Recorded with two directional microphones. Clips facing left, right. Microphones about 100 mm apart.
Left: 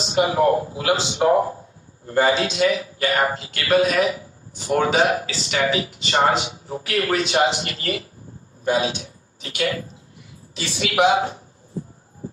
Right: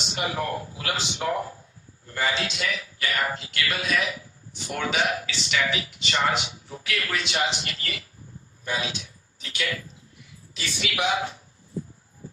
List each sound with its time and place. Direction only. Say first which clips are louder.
0.0 s a man's voice: left 11 dB; 30° left (ahead or behind)